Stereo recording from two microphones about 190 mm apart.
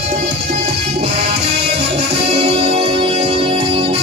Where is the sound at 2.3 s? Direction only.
30° right (ahead or behind).